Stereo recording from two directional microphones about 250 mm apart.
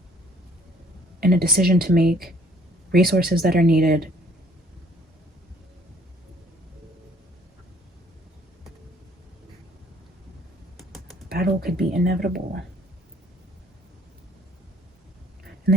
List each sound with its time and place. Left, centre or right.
1.2 s speech: right
10.8 s typing: centre
11.3 s computer keyboard: right
11.8 s a sound: centre
12.0 s speech: right